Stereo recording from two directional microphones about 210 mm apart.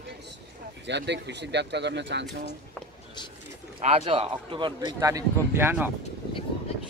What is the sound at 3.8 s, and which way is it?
Speech, 30° right (ahead or behind).